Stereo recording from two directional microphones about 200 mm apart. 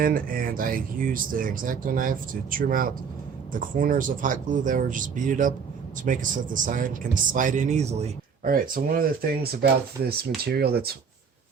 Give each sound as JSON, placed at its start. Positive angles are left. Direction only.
{"t": 0.0, "sound": "speech", "side_deg": -45}
{"t": 8.4, "sound": "speech", "side_deg": -45}